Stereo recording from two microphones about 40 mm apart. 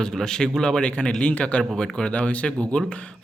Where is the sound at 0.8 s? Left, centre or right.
Left.